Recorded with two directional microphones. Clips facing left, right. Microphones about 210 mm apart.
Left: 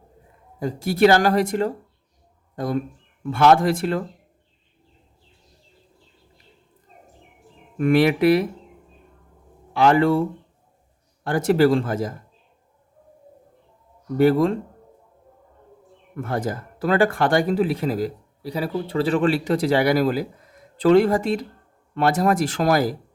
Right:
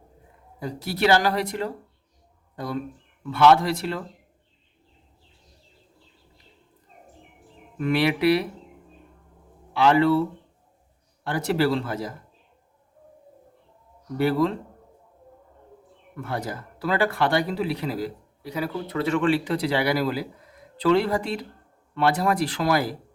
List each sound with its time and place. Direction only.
0.6 s speech: 45° left (ahead or behind)
7.8 s speech: 50° left (ahead or behind)
9.7 s speech: 45° left (ahead or behind)
14.2 s speech: 45° left (ahead or behind)
16.1 s speech: 45° left (ahead or behind)